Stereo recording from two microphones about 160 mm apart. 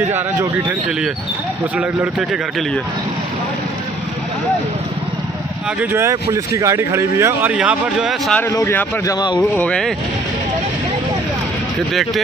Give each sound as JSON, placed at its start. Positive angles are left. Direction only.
{"t": 0.1, "sound": "speech", "side_deg": -10}
{"t": 5.8, "sound": "speech", "side_deg": -15}
{"t": 8.4, "sound": "speech", "side_deg": 15}
{"t": 9.4, "sound": "speech", "side_deg": 5}
{"t": 11.9, "sound": "speech", "side_deg": 0}